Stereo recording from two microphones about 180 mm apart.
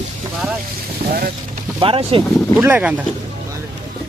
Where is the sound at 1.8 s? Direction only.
30° right (ahead or behind).